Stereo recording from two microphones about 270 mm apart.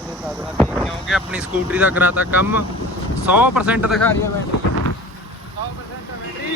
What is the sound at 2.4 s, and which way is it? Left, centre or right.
Speech, left.